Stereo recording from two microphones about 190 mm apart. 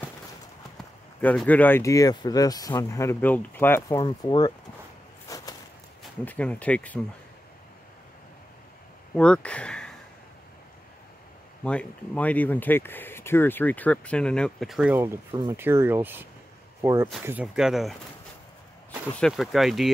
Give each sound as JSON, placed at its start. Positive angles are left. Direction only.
{"t": 1.2, "sound": "speech", "side_deg": 5}
{"t": 4.0, "sound": "speech", "side_deg": 20}
{"t": 5.3, "sound": "a sound", "side_deg": 20}
{"t": 6.2, "sound": "speech", "side_deg": 5}
{"t": 9.1, "sound": "speech", "side_deg": 5}
{"t": 11.6, "sound": "speech", "side_deg": 5}
{"t": 19.1, "sound": "speech", "side_deg": 0}